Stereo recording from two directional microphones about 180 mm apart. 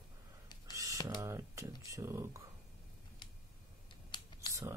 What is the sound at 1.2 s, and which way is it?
Speech, 15° right (ahead or behind).